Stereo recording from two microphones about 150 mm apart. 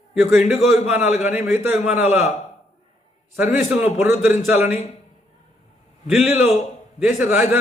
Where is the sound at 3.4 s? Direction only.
10° right (ahead or behind).